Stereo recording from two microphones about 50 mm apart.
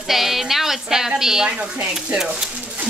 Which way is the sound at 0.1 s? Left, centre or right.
Centre.